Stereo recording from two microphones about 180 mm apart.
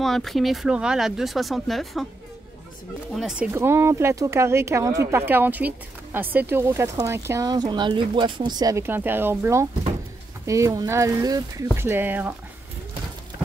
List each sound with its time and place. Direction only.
0.0 s speech: centre (ahead or behind)
3.2 s speech: 5° right (ahead or behind)
3.5 s speech: 15° right (ahead or behind)